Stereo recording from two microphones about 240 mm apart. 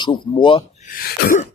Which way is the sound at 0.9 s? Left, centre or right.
Left.